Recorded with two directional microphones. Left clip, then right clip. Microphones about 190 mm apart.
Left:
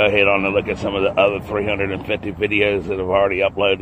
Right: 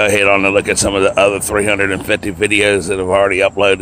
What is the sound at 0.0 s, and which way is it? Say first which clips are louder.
Speech: right 4 dB; 40° right (ahead or behind).